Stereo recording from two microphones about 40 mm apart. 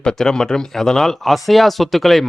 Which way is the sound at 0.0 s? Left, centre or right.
Centre.